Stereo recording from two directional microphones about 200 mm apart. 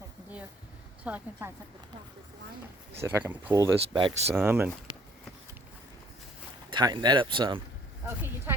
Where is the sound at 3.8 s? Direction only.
25° right (ahead or behind).